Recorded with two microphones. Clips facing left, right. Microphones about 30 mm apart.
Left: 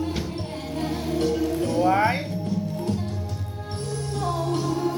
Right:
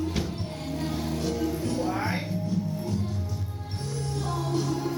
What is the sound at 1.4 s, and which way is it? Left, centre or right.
Music, left.